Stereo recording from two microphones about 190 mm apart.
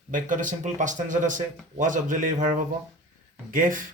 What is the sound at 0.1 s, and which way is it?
Speech, 45° right (ahead or behind).